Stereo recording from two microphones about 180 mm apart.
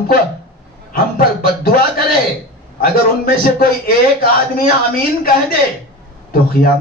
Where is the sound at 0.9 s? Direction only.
55° left (ahead or behind).